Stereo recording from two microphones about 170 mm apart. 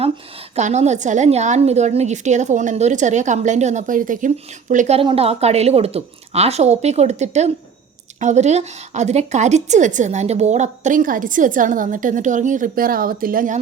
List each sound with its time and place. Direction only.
0.5 s a woman's voice: 40° right (ahead or behind)
4.9 s a woman's voice: 35° right (ahead or behind); by 13.6 s 55° right (ahead or behind)